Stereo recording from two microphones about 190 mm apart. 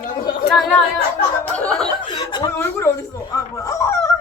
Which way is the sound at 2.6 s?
15° left (ahead or behind).